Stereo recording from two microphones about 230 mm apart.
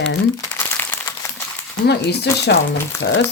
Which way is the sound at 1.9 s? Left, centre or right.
Left.